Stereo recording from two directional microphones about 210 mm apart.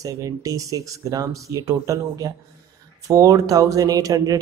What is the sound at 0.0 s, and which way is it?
A man's voice, 15° right (ahead or behind).